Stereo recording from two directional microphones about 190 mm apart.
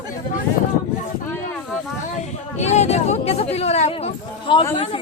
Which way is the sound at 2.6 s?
35° left (ahead or behind).